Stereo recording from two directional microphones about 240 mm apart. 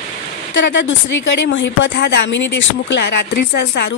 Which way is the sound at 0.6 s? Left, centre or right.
Left.